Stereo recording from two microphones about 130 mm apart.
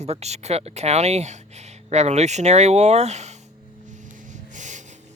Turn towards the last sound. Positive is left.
turn(degrees=-70)  # may be behind; listen again after turning